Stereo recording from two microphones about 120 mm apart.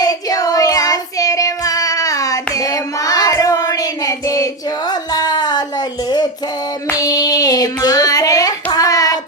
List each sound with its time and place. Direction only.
0.0 s child singing: 30° left (ahead or behind)
4.9 s a sound: 35° left (ahead or behind)
6.9 s child singing: 30° left (ahead or behind)